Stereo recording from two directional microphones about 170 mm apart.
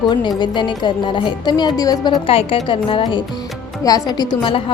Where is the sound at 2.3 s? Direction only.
35° left (ahead or behind).